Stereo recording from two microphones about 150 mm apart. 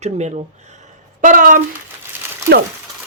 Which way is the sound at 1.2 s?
60° right (ahead or behind).